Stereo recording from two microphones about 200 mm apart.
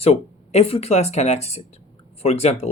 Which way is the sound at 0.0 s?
30° left (ahead or behind).